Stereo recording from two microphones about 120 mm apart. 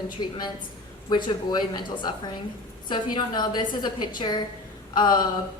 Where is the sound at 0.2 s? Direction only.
35° left (ahead or behind).